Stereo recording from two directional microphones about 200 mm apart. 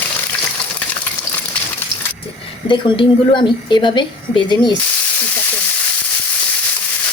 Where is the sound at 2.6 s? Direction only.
25° left (ahead or behind).